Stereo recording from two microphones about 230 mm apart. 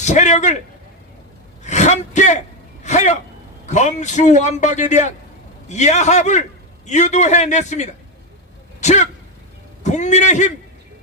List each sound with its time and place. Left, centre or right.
0.0 s a man's voice: left
1.6 s a man's voice: left
8.8 s a sound: left
9.8 s a man's voice: left